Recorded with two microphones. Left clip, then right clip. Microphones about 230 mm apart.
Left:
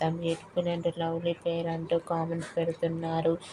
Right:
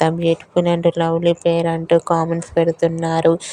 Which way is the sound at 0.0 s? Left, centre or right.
Right.